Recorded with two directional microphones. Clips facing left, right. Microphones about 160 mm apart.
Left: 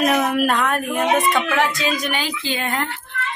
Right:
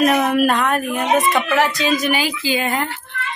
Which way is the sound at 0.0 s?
Centre (ahead or behind).